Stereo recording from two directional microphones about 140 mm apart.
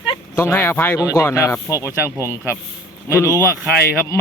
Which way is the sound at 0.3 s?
15° left (ahead or behind).